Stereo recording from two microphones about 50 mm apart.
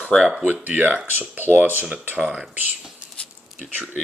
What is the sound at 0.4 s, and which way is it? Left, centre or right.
Speech, right.